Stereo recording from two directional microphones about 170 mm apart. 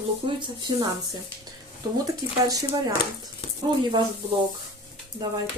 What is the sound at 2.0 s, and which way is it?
Speech, 20° right (ahead or behind).